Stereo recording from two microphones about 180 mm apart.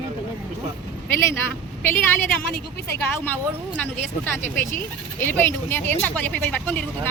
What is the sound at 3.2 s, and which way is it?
Speech, 10° left (ahead or behind).